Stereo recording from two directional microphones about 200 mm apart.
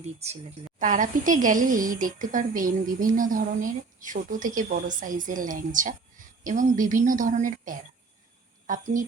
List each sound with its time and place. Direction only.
0.2 s a woman's voice: 35° right (ahead or behind)